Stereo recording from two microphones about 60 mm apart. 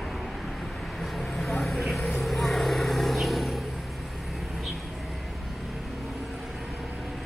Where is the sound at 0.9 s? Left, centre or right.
Centre.